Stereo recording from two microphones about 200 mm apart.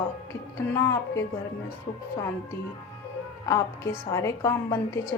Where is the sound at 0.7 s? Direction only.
10° left (ahead or behind).